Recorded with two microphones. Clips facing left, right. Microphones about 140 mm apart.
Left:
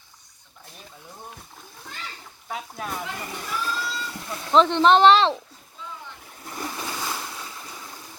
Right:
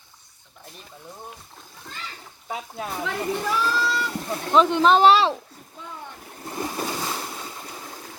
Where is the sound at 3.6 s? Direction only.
80° right.